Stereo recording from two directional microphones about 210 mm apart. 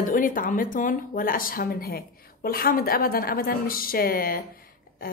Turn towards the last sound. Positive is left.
turn(degrees=45)  # may be behind; listen again after turning